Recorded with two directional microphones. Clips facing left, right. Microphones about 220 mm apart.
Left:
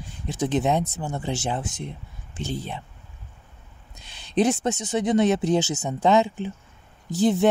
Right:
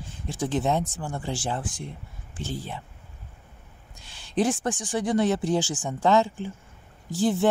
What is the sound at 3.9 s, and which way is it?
Speech, 20° left (ahead or behind).